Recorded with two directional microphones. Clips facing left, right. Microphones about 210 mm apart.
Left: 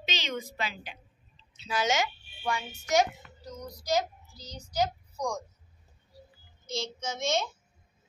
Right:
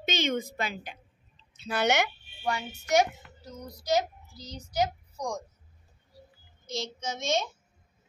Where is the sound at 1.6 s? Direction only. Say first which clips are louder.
Right 2 dB; 60° right (ahead or behind).